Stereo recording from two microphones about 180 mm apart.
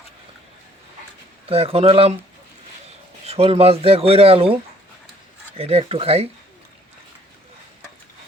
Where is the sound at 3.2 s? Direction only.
35° right (ahead or behind).